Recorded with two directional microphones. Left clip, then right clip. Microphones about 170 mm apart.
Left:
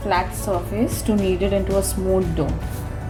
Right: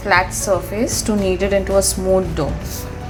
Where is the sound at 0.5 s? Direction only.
20° right (ahead or behind).